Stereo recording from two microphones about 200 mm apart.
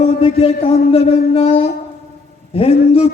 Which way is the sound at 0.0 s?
30° left (ahead or behind).